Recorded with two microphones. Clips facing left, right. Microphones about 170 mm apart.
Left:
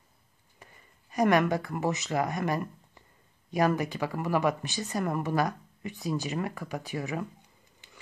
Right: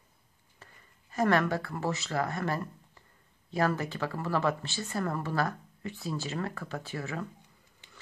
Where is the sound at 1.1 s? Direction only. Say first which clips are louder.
Left 3 dB; 15° left (ahead or behind).